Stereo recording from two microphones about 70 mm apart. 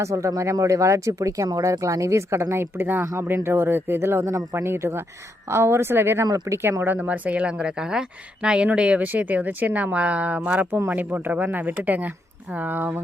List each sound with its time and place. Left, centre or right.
0.0 s speech: right
6.2 s speech: right
6.5 s speech: right